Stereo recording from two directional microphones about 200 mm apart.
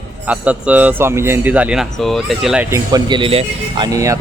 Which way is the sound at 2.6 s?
15° right (ahead or behind).